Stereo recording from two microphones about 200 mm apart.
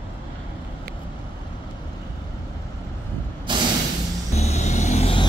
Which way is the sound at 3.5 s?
25° right (ahead or behind).